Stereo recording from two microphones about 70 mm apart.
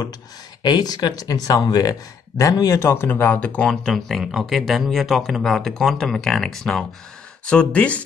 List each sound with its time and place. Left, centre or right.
0.6 s speech: left
2.8 s speech: left; by 8.0 s centre